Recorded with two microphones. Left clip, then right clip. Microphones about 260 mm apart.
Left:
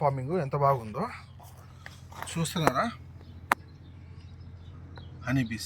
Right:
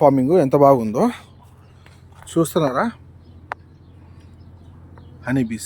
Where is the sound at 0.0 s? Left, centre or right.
Right.